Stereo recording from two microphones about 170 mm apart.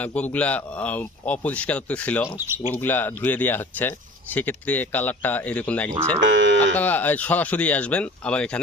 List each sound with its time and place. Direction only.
0.0 s speech: 10° left (ahead or behind)
6.1 s speech: 90° right
6.7 s speech: 10° left (ahead or behind)